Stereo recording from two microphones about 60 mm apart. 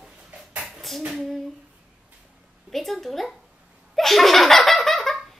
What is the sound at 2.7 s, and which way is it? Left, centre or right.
Speech, centre.